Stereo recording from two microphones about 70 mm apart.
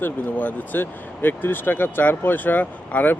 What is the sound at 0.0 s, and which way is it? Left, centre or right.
Speech, left.